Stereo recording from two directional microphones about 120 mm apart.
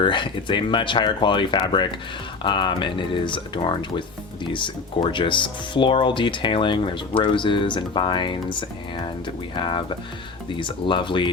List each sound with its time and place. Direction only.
0.0 s speech: 40° left (ahead or behind)